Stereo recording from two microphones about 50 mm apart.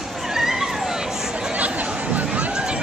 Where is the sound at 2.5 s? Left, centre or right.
Centre.